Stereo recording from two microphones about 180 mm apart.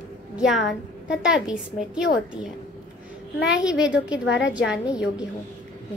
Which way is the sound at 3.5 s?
5° right (ahead or behind).